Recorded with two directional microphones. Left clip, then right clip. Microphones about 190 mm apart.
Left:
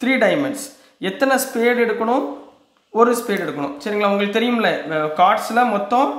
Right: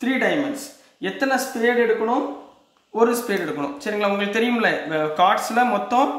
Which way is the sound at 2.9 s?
25° left (ahead or behind).